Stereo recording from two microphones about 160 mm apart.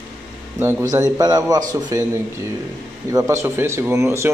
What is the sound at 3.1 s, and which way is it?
Speech, 20° right (ahead or behind).